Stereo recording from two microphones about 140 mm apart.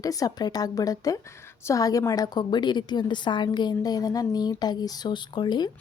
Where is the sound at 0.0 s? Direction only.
25° left (ahead or behind).